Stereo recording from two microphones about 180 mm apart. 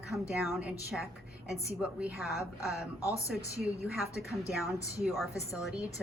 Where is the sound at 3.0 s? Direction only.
15° left (ahead or behind).